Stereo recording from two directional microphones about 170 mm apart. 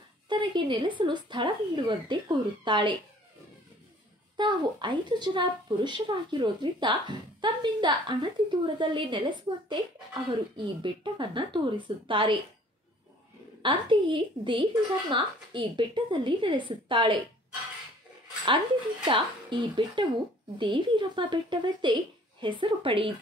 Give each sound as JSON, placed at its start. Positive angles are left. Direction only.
{"t": 0.3, "sound": "speech", "side_deg": -30}
{"t": 4.4, "sound": "speech", "side_deg": -25}
{"t": 13.6, "sound": "speech", "side_deg": -30}
{"t": 19.0, "sound": "speech", "side_deg": -30}